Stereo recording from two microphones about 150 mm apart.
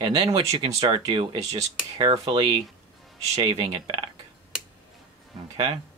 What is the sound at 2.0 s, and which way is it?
Speech, 35° right (ahead or behind).